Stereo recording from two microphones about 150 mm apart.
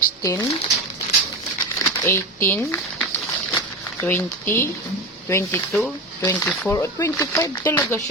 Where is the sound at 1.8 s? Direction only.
15° left (ahead or behind).